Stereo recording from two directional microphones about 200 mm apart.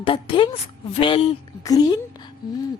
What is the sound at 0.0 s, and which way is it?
Speech, 25° left (ahead or behind).